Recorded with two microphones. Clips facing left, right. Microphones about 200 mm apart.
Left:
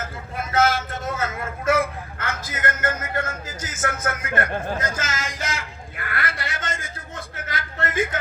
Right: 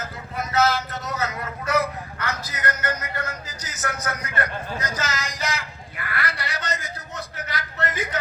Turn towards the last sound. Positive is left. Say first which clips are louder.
# left 1 dB
turn(degrees=50)  # may be behind; listen again after turning